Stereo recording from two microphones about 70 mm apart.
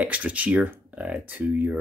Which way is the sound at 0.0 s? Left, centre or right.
Right.